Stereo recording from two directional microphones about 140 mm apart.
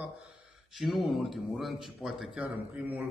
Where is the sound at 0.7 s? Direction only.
Centre (ahead or behind).